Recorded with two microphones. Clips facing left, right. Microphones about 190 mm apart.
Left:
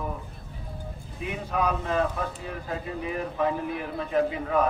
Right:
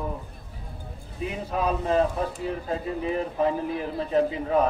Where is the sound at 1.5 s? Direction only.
30° right (ahead or behind).